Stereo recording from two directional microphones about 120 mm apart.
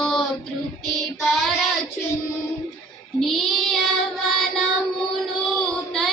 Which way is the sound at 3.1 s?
Centre (ahead or behind).